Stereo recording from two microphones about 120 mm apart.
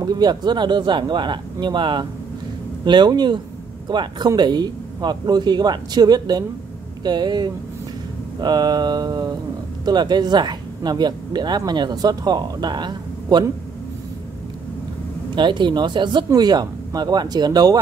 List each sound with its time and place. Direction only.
0.0 s speech: 35° right (ahead or behind)
15.3 s speech: 40° right (ahead or behind)